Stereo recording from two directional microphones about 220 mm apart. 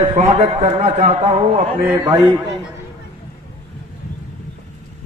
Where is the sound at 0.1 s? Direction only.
30° right (ahead or behind).